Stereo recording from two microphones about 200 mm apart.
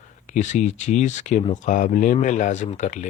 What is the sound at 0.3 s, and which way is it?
Speech, 35° left (ahead or behind).